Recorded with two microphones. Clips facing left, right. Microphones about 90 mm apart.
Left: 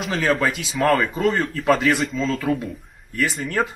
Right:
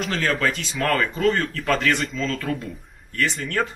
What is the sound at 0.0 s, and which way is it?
A man's voice, 5° left (ahead or behind).